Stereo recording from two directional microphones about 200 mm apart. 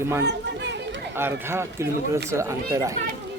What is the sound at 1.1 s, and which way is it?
Speech, 10° right (ahead or behind).